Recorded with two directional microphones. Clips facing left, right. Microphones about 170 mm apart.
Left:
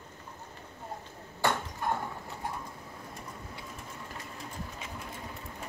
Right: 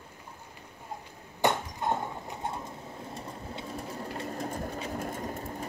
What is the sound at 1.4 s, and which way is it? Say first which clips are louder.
Clip-clop: right 3 dB; 20° right (ahead or behind).